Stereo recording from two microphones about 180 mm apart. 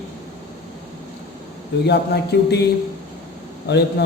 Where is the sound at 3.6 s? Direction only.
70° left (ahead or behind).